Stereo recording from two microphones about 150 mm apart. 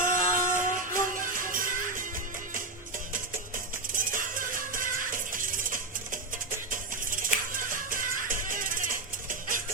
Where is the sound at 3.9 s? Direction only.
65° right (ahead or behind).